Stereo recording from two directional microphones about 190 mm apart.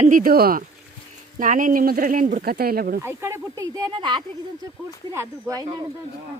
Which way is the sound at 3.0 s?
15° right (ahead or behind).